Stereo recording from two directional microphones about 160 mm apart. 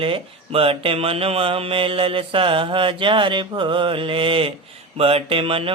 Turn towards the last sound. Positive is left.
turn(degrees=-35)  # may be behind; listen again after turning